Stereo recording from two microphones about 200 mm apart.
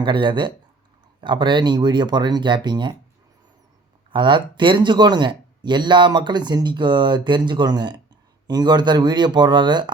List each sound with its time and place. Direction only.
0.0 s speech: 25° right (ahead or behind)
4.1 s speech: 25° right (ahead or behind)